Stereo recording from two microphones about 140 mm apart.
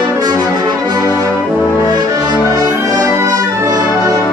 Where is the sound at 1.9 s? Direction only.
30° right (ahead or behind).